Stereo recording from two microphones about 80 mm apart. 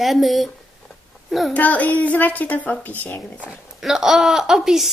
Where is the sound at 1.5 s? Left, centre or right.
Centre.